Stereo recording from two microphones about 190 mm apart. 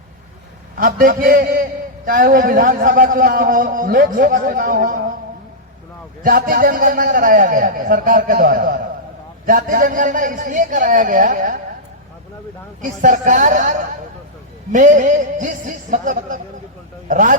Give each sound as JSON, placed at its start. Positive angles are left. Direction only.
{"t": 0.8, "sound": "a man's voice", "side_deg": -45}
{"t": 6.2, "sound": "a man's voice", "side_deg": -50}
{"t": 13.0, "sound": "a man's voice", "side_deg": -40}